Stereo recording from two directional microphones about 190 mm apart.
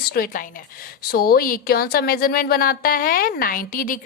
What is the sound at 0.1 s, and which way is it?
A woman's voice, 50° left (ahead or behind).